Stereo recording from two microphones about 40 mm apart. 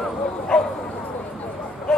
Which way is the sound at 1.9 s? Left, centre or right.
Centre.